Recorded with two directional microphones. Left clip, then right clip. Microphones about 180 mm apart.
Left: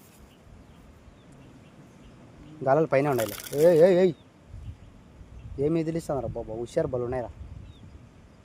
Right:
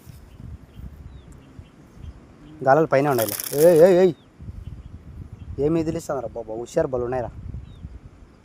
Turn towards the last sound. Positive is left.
turn(degrees=-30)  # may be behind; listen again after turning